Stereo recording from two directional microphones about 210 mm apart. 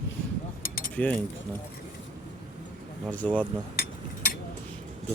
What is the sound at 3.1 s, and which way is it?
Speech, 5° left (ahead or behind).